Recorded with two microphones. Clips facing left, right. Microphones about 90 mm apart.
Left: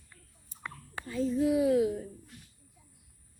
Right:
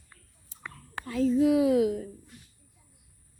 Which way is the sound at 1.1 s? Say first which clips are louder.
Right 5 dB; 90° right.